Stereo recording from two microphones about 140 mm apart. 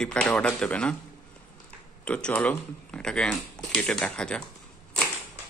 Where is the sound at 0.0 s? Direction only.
5° left (ahead or behind).